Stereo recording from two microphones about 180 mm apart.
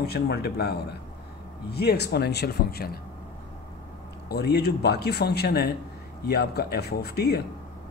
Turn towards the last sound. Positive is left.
turn(degrees=60)  # may be behind; listen again after turning